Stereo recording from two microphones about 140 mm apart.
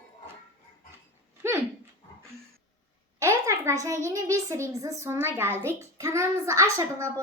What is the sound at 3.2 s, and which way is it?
A woman's voice, 20° right (ahead or behind).